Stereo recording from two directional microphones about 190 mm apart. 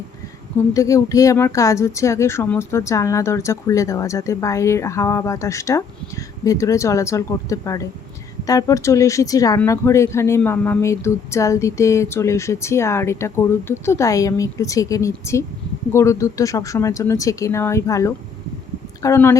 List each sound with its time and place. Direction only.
0.7 s speech: 15° left (ahead or behind)